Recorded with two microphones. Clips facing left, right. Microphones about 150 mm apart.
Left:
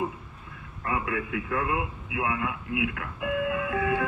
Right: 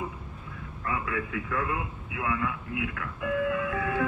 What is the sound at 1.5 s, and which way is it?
A man's voice, 25° left (ahead or behind).